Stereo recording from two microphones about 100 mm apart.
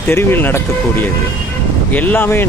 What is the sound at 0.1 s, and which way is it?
Speech, 20° left (ahead or behind).